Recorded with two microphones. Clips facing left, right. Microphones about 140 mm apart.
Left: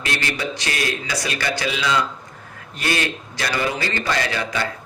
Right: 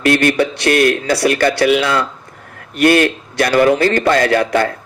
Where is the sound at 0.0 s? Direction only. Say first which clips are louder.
Right 13 dB; 60° right (ahead or behind).